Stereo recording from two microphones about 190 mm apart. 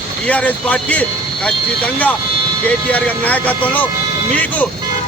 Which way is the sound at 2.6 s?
5° left (ahead or behind).